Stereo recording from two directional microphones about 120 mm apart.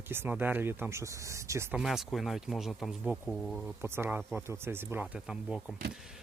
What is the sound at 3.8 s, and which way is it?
Speech, 20° right (ahead or behind).